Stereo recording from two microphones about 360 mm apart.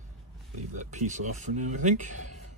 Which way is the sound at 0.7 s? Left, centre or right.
Centre.